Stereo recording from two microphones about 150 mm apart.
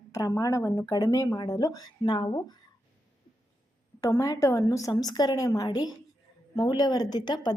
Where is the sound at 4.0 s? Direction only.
20° left (ahead or behind).